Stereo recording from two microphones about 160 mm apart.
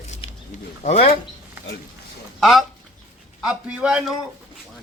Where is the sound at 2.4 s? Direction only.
Centre (ahead or behind).